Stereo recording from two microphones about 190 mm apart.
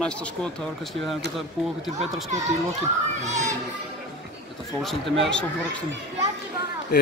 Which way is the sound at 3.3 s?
40° right (ahead or behind).